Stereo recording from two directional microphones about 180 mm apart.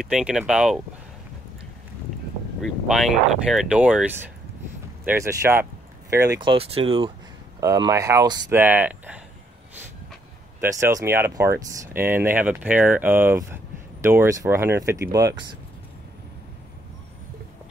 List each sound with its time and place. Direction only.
0.0 s speech: 5° right (ahead or behind)
2.6 s speech: centre (ahead or behind); by 7.1 s 30° right (ahead or behind)
7.6 s speech: 20° right (ahead or behind)
8.5 s speech: 10° right (ahead or behind)
10.6 s speech: 15° right (ahead or behind)